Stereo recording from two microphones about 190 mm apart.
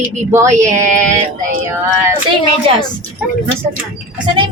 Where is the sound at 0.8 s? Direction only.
40° right (ahead or behind).